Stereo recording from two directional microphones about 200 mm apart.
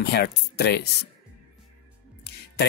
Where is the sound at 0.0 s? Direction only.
55° left (ahead or behind).